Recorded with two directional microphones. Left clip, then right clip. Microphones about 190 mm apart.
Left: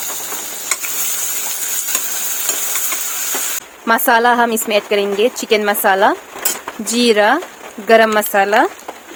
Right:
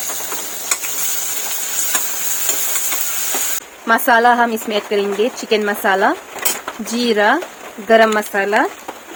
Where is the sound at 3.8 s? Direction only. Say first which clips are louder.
Even; 35° left (ahead or behind).